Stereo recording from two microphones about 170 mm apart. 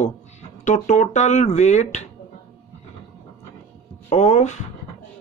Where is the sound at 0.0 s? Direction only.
45° left (ahead or behind).